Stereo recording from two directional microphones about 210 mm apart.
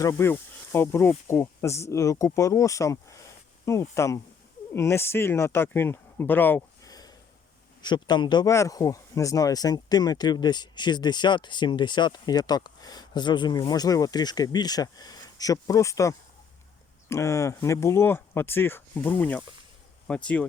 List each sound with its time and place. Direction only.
0.0 s speech: 15° left (ahead or behind)